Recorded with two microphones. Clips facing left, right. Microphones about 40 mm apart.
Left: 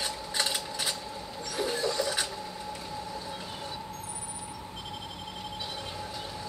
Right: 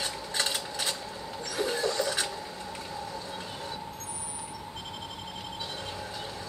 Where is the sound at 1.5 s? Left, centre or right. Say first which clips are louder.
Right 1 dB; centre.